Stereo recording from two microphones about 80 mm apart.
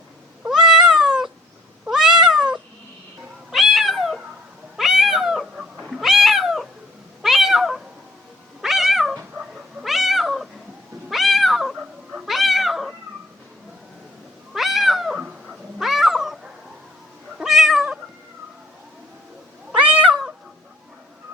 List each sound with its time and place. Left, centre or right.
0.4 s cat: centre
14.5 s cat: centre
19.7 s cat: centre
20.1 s cat: centre